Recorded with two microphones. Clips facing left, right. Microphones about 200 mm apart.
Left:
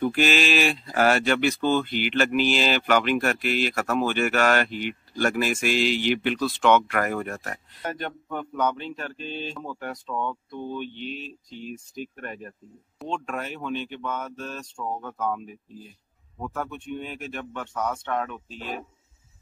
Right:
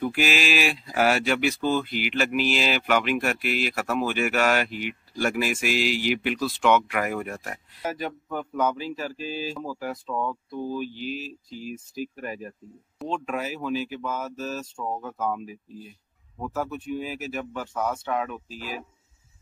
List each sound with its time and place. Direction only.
0.0 s speech: 5° right (ahead or behind)